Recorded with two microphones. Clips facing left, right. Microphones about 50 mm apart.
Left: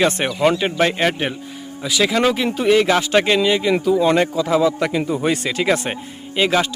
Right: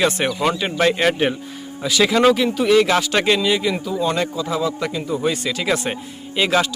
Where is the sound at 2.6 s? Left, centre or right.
Left.